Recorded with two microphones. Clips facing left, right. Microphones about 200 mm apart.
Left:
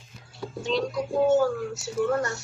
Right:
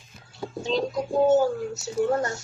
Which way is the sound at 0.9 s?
45° right (ahead or behind).